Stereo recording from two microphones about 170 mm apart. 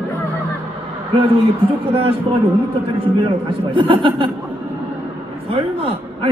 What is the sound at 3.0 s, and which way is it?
A man's voice, 30° right (ahead or behind).